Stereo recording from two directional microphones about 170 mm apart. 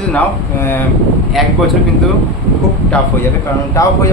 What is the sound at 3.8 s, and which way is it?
Speech, 15° left (ahead or behind).